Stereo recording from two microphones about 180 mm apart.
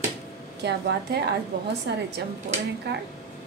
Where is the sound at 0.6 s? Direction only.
70° right (ahead or behind).